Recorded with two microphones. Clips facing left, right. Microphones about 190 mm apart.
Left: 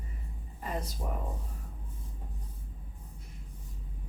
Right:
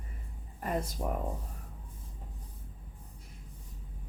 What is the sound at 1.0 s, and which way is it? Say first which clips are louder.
Speech: right 4 dB; 75° right (ahead or behind).